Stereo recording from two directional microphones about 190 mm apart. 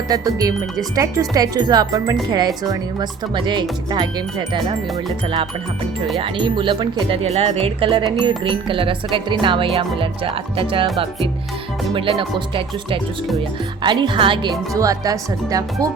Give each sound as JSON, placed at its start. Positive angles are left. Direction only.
{"t": 0.1, "sound": "speech", "side_deg": -20}
{"t": 6.1, "sound": "speech", "side_deg": -25}
{"t": 13.8, "sound": "speech", "side_deg": -25}